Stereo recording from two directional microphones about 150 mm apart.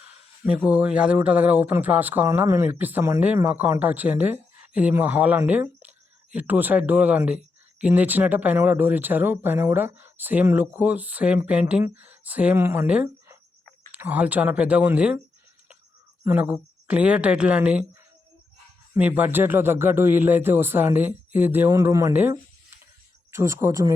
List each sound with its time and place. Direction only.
0.7 s speech: 5° right (ahead or behind)
16.2 s speech: 10° right (ahead or behind)
18.9 s speech: 10° right (ahead or behind)